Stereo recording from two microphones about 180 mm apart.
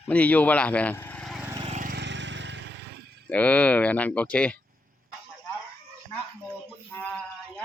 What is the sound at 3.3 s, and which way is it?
Speech, 10° left (ahead or behind).